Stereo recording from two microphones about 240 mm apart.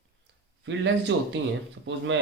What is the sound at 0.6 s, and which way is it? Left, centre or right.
Speech, right.